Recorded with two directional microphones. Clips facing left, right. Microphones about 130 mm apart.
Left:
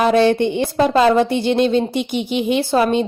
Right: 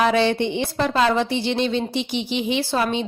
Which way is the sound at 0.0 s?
50° left (ahead or behind).